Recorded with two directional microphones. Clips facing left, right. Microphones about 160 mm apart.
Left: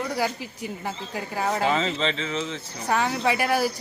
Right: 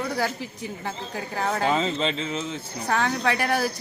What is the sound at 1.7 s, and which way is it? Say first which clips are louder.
Speech: even; 10° right (ahead or behind).